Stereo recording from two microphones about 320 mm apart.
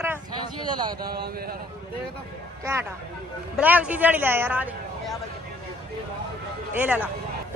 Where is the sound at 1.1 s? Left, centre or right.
Right.